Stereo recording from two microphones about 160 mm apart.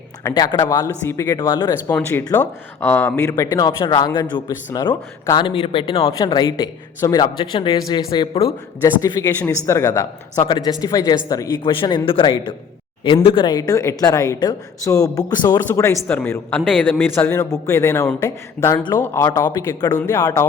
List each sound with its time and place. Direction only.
0.2 s speech: 20° left (ahead or behind)
1.9 s a man's voice: 10° left (ahead or behind)